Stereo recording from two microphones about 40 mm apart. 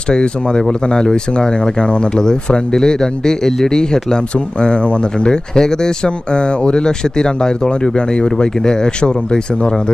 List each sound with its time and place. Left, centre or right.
0.1 s speech: left